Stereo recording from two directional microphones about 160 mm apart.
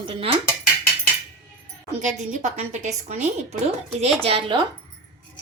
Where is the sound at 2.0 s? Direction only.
50° right (ahead or behind).